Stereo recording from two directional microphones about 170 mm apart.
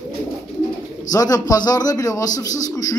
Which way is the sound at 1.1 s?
20° left (ahead or behind).